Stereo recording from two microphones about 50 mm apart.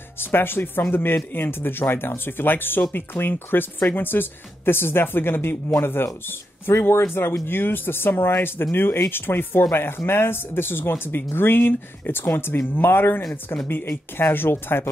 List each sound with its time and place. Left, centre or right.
0.2 s speech: left